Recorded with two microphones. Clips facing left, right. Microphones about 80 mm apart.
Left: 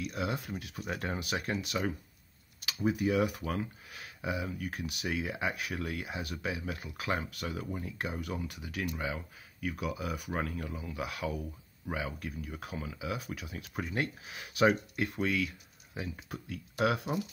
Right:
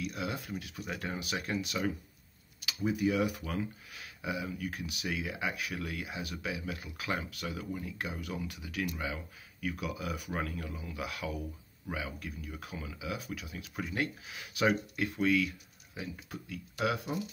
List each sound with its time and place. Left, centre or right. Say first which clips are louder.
0.0 s speech: left 2 dB; left
2.8 s speech: left 1 dB; left
16.4 s speech: left 3 dB; left